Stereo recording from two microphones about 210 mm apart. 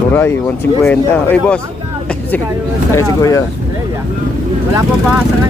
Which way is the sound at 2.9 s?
15° left (ahead or behind).